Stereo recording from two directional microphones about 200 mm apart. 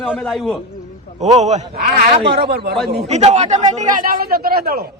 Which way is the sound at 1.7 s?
50° right (ahead or behind).